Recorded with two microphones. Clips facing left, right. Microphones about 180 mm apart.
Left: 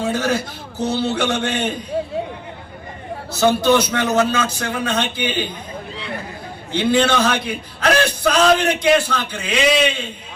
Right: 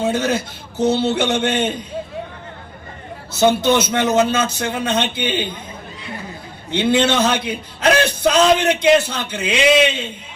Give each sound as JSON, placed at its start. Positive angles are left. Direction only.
{"t": 0.0, "sound": "a man's voice", "side_deg": -20}
{"t": 3.3, "sound": "a man's voice", "side_deg": -20}
{"t": 6.7, "sound": "a man's voice", "side_deg": -20}